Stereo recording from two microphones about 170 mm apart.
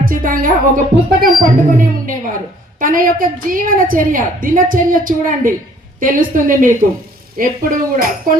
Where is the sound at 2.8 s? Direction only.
55° right (ahead or behind).